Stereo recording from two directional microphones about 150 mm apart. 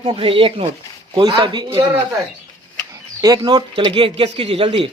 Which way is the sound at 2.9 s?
25° right (ahead or behind).